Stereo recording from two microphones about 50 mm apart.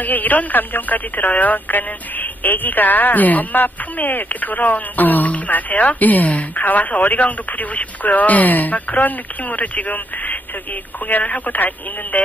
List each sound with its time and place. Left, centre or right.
0.0 s speech: left